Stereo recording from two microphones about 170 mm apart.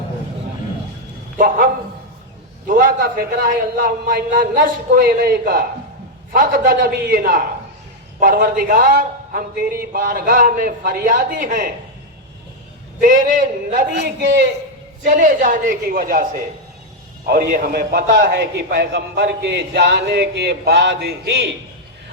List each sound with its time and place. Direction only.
1.4 s a man's voice: 55° right (ahead or behind)
13.0 s a man's voice: 50° right (ahead or behind); by 14.1 s 70° right (ahead or behind)
15.0 s a man's voice: 50° right (ahead or behind)
17.2 s a man's voice: 65° right (ahead or behind)